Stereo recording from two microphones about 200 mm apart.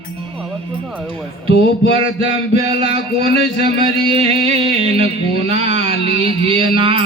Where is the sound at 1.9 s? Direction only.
30° right (ahead or behind).